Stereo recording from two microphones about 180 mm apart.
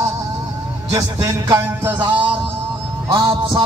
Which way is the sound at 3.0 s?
25° right (ahead or behind).